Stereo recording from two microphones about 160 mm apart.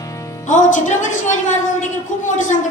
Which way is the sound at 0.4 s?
50° left (ahead or behind).